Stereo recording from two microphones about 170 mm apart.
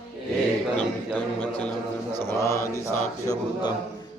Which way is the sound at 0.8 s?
10° left (ahead or behind).